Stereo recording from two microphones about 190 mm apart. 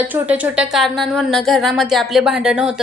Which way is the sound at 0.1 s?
10° right (ahead or behind).